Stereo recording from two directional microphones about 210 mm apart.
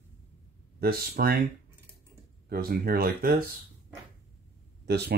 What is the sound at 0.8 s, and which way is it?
Speech, 45° right (ahead or behind).